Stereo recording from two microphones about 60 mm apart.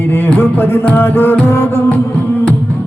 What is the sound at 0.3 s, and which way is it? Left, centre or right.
Music, left.